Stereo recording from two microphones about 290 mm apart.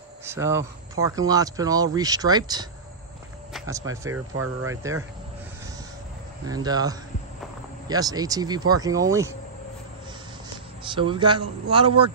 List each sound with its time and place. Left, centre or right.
0.2 s speech: centre
6.4 s speech: centre
10.8 s speech: centre